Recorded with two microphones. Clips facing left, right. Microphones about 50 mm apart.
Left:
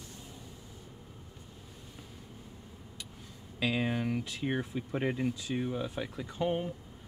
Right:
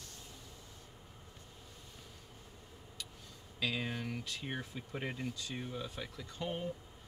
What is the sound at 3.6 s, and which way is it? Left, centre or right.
Speech, centre.